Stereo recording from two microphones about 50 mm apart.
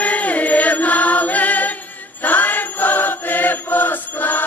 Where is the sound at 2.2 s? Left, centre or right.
Left.